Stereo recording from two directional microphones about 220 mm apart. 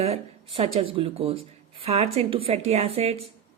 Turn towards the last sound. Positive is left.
turn(degrees=-30)  # may be behind; listen again after turning